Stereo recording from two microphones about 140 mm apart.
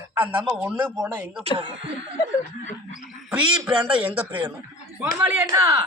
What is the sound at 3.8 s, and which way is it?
Speech, 10° right (ahead or behind).